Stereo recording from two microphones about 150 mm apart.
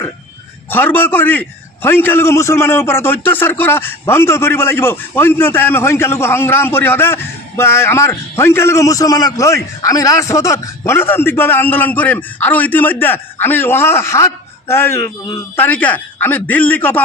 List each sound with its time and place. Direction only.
0.7 s a man's voice: 15° left (ahead or behind)